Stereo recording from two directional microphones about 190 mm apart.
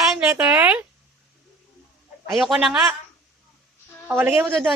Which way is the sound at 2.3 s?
Centre (ahead or behind).